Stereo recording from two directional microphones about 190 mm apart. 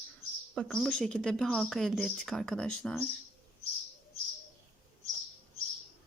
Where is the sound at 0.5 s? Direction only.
5° left (ahead or behind).